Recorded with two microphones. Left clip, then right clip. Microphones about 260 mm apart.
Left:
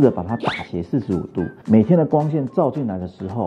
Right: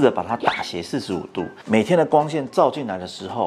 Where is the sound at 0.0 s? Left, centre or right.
Centre.